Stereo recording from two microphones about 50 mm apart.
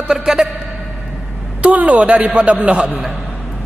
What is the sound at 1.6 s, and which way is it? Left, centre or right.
A man's voice, right.